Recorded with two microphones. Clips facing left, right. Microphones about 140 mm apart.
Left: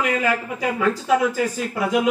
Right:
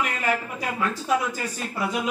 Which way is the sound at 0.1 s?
90° left.